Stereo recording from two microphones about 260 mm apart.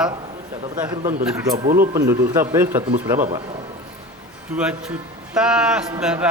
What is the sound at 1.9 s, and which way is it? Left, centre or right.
Speech, centre.